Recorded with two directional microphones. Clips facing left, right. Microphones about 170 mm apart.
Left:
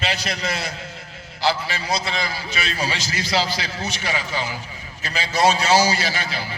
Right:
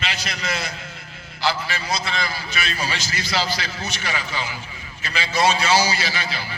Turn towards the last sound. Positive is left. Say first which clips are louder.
# left 2 dB
turn(degrees=45)  # may be behind; listen again after turning